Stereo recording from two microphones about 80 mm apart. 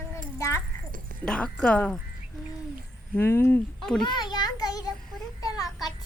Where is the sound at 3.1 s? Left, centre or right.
Left.